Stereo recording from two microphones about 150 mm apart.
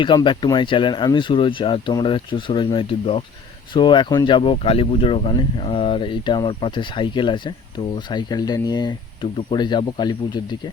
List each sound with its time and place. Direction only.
0.0 s speech: 30° left (ahead or behind)